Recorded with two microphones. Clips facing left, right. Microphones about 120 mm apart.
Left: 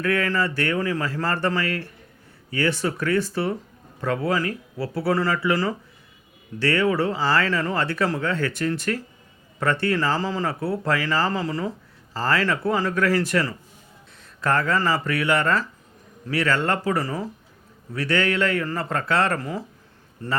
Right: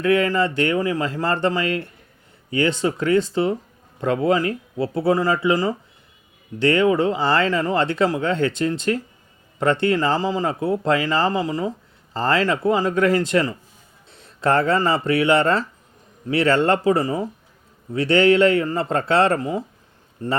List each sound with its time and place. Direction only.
0.0 s speech: 20° right (ahead or behind)